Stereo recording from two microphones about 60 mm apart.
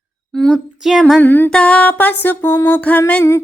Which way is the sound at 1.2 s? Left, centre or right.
Left.